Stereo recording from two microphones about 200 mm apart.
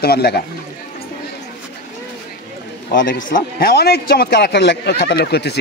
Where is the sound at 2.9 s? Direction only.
45° left (ahead or behind).